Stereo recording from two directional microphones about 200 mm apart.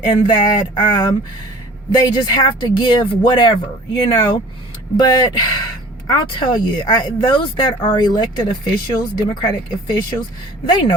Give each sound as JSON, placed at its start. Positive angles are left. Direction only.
{"t": 0.0, "sound": "speech", "side_deg": 20}